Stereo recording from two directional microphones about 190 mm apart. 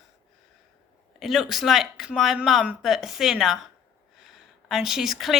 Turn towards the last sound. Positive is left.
turn(degrees=0)  # may be behind; listen again after turning